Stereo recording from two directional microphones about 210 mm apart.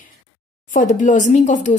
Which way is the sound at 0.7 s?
40° left (ahead or behind).